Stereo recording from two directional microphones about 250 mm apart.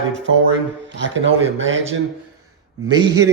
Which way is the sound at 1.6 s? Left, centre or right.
Right.